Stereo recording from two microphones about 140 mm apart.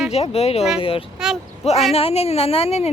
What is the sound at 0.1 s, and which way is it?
A woman's voice, 50° left (ahead or behind).